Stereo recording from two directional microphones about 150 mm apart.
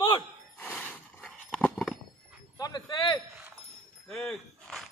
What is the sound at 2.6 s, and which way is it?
Wind chime, 25° left (ahead or behind).